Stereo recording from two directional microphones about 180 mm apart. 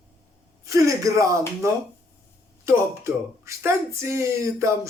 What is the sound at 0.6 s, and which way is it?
Speech, 20° right (ahead or behind).